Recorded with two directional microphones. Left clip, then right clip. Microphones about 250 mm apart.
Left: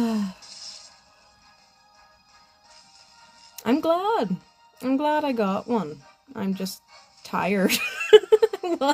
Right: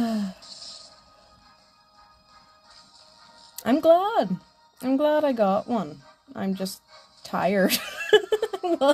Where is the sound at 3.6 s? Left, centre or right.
Centre.